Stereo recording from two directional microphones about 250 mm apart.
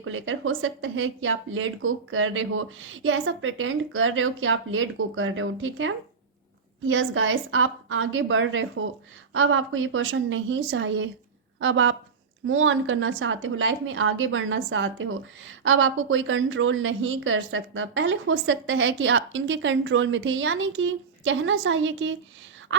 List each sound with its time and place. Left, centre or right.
0.0 s a woman's voice: right